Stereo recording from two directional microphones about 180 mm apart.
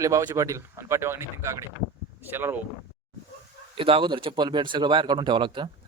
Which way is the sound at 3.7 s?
30° right (ahead or behind).